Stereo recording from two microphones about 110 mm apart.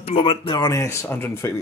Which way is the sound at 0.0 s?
60° left (ahead or behind).